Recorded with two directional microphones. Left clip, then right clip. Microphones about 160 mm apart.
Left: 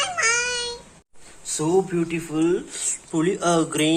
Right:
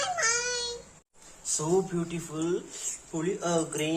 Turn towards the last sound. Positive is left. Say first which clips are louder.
# left 8 dB
turn(degrees=30)  # may be behind; listen again after turning